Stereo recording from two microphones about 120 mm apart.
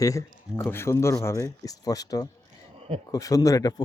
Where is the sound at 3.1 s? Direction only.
30° left (ahead or behind).